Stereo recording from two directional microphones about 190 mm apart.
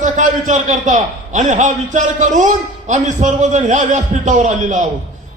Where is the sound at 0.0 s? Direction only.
40° right (ahead or behind).